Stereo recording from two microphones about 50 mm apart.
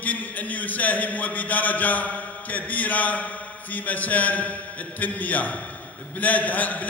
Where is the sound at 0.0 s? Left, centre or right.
Left.